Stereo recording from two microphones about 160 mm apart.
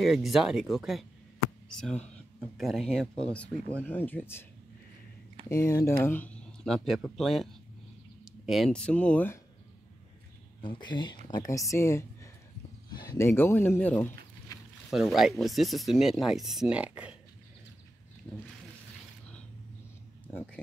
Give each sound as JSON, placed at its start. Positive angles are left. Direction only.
{"t": 0.0, "sound": "speech", "side_deg": 0}
{"t": 5.5, "sound": "speech", "side_deg": 20}
{"t": 10.6, "sound": "speech", "side_deg": 30}
{"t": 14.9, "sound": "speech", "side_deg": 0}
{"t": 18.3, "sound": "speech", "side_deg": 10}